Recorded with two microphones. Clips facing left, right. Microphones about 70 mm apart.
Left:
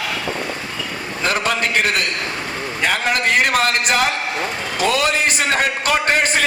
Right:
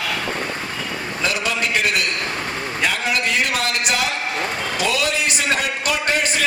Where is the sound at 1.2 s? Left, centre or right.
Left.